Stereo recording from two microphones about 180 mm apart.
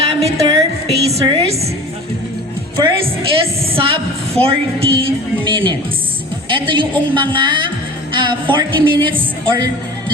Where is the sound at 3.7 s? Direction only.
30° right (ahead or behind).